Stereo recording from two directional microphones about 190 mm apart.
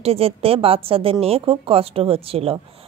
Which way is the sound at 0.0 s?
30° right (ahead or behind).